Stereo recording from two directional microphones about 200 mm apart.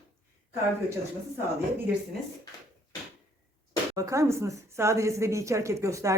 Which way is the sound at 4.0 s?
15° right (ahead or behind).